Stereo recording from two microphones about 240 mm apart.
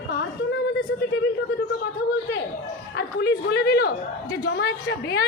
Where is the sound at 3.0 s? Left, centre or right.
Left.